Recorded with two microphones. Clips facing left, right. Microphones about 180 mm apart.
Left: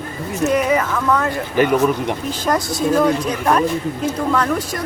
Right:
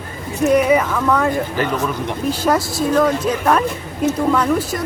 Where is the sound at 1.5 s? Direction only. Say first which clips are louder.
Left 5 dB; 15° left (ahead or behind).